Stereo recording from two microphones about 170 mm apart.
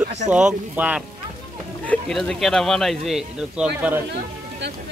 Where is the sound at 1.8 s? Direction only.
5° left (ahead or behind).